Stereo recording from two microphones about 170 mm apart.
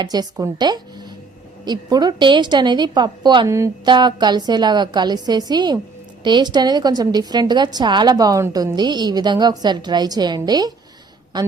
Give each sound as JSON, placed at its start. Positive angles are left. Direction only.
{"t": 0.0, "sound": "a woman's voice", "side_deg": -25}